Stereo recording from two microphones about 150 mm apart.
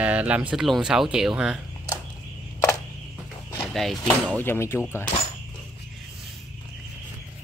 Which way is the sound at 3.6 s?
Centre (ahead or behind).